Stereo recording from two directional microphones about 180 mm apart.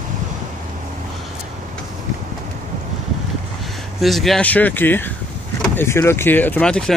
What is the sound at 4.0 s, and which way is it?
Speech, centre (ahead or behind).